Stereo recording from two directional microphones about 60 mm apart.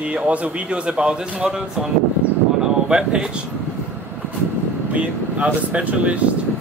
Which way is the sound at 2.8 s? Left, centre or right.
Centre.